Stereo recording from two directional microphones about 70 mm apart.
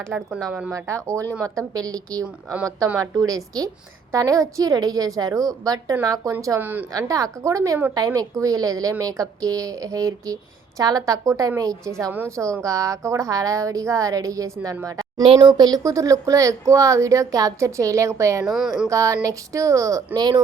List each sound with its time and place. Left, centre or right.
0.1 s a woman's voice: centre
0.7 s speech: right
2.2 s a woman's voice: centre
2.6 s speech: right
6.6 s a woman's voice: right
6.9 s speech: right
15.4 s speech: right
15.8 s speech: right
18.4 s speech: centre
18.9 s speech: right